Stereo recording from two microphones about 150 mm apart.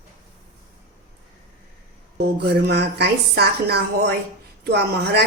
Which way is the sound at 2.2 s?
90° right.